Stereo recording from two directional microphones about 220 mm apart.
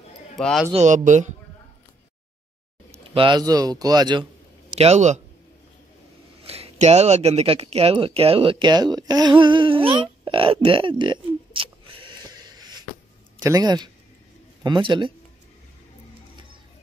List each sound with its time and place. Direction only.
0.4 s speech: centre (ahead or behind)
0.7 s speech: 35° right (ahead or behind)
2.9 s speech: 20° right (ahead or behind)
4.7 s speech: 30° right (ahead or behind)
6.4 s speech: 25° right (ahead or behind)